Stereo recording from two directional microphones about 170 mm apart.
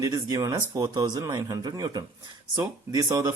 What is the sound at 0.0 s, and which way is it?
Speech, 20° right (ahead or behind).